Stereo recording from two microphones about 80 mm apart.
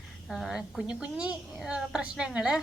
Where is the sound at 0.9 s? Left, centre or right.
Centre.